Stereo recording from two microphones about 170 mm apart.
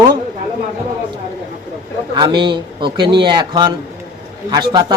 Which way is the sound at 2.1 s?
25° right (ahead or behind).